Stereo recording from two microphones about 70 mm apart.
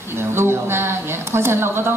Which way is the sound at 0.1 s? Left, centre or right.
Right.